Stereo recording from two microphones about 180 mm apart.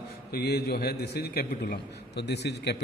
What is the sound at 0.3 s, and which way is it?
A man's voice, 60° left (ahead or behind).